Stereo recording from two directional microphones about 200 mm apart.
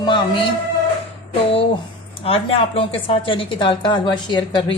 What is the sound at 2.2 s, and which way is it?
A woman's voice, 30° left (ahead or behind).